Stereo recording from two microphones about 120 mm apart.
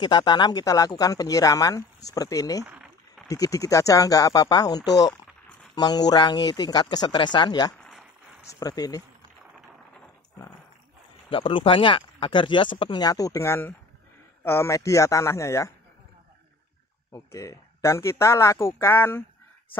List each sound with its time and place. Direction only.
0.0 s speech: 35° left (ahead or behind)
2.6 s a sound: 15° right (ahead or behind)
3.3 s speech: 30° left (ahead or behind)
11.2 s speech: 45° left (ahead or behind)
13.0 s speech: 30° left (ahead or behind)
17.1 s speech: 25° left (ahead or behind)